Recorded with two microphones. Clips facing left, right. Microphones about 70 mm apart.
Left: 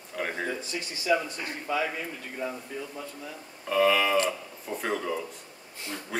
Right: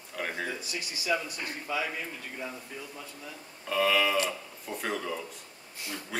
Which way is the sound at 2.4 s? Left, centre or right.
Centre.